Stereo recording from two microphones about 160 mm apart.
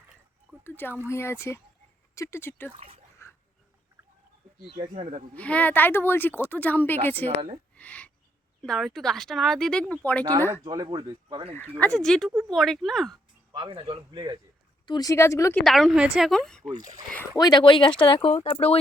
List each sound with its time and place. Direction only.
0.6 s speech: 10° left (ahead or behind)
2.7 s speech: 35° right (ahead or behind)
3.2 s a sound: 15° left (ahead or behind)
4.8 s speech: 45° right (ahead or behind)
5.3 s speech: 10° left (ahead or behind)
7.3 s speech: 40° right (ahead or behind)
7.8 s speech: 10° left (ahead or behind)
10.6 s speech: 25° right (ahead or behind)
11.9 s speech: centre (ahead or behind)
13.5 s speech: 30° right (ahead or behind)
14.8 s speech: 25° left (ahead or behind)
15.6 s speech: centre (ahead or behind)
16.8 s speech: 50° right (ahead or behind)
17.3 s speech: 25° left (ahead or behind)